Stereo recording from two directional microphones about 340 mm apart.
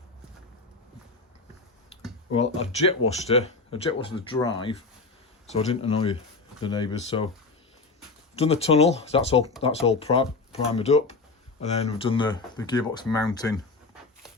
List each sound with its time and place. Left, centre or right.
2.3 s speech: centre
8.4 s speech: centre